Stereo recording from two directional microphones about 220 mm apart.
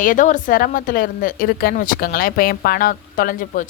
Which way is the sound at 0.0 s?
35° left (ahead or behind).